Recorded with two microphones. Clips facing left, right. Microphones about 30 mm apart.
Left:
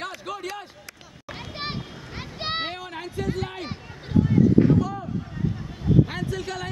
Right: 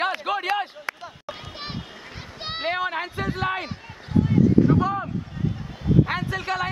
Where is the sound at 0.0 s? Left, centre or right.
Right.